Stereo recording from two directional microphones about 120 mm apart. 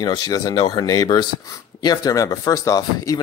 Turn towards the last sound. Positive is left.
turn(degrees=30)  # may be behind; listen again after turning